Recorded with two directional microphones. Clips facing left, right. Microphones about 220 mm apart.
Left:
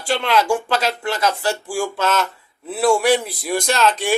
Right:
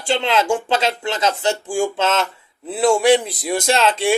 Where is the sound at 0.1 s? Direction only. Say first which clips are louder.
Even; 25° right (ahead or behind).